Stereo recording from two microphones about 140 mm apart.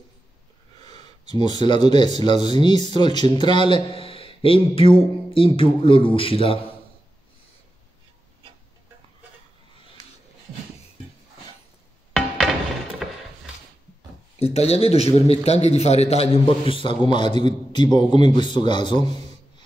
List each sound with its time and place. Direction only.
1.2 s speech: 30° left (ahead or behind)
14.4 s a man's voice: 50° left (ahead or behind)
17.3 s a man's voice: 50° right (ahead or behind)
17.7 s speech: 30° left (ahead or behind)